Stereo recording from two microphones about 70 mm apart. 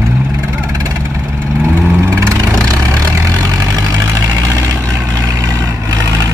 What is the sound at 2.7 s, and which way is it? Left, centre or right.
Vehicle, right.